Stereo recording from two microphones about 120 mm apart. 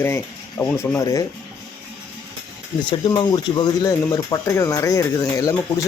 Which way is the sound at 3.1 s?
40° left (ahead or behind).